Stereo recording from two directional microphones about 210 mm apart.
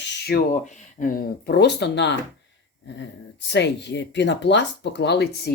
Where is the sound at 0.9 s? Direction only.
40° left (ahead or behind).